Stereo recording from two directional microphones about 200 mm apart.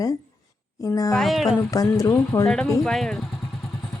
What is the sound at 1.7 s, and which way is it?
Speech, 15° left (ahead or behind).